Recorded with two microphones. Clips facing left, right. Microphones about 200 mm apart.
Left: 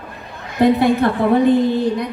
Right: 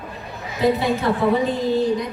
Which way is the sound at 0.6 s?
60° left (ahead or behind).